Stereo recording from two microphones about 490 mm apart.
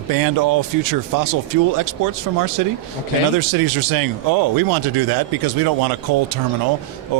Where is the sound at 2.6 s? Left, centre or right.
Right.